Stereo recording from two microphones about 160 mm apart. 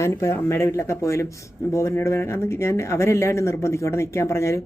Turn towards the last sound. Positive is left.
turn(degrees=15)  # may be behind; listen again after turning